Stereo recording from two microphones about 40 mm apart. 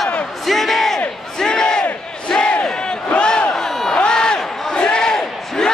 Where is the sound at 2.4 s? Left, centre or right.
Left.